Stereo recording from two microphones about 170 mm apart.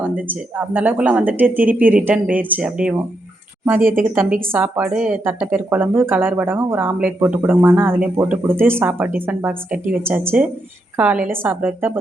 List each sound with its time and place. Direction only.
0.0 s speech: 10° right (ahead or behind)
3.8 s speech: 55° right (ahead or behind)
4.1 s speech: 10° right (ahead or behind)